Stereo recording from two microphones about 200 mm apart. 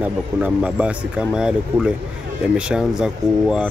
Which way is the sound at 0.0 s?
5° right (ahead or behind).